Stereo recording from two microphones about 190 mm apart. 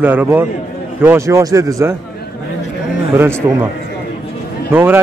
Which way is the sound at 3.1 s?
15° right (ahead or behind).